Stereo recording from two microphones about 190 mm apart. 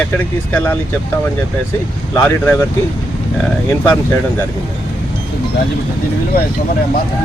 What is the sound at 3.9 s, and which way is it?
Speech, 15° left (ahead or behind).